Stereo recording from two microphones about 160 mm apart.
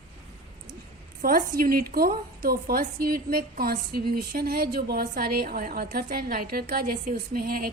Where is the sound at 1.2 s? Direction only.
60° right (ahead or behind).